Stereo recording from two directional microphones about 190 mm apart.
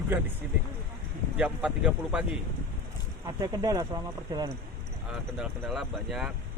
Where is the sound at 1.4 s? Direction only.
5° right (ahead or behind).